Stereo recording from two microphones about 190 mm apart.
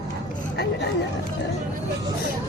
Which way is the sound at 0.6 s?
65° left (ahead or behind).